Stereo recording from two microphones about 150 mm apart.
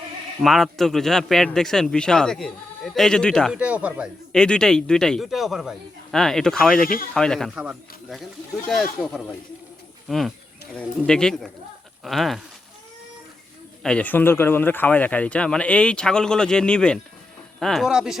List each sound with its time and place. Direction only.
0.4 s a man's voice: centre (ahead or behind)
3.5 s speech: 10° right (ahead or behind)
4.3 s a man's voice: 5° left (ahead or behind)
6.8 s speech: 70° left (ahead or behind)
7.1 s a man's voice: 5° left (ahead or behind)
13.8 s a man's voice: 10° left (ahead or behind)